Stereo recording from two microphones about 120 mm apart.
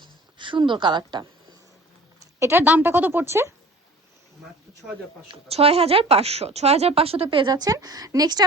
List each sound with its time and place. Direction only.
0.0 s speech: 40° right (ahead or behind)
2.4 s a woman's voice: 20° right (ahead or behind)
5.3 s speech: 55° right (ahead or behind); by 8.4 s 35° right (ahead or behind)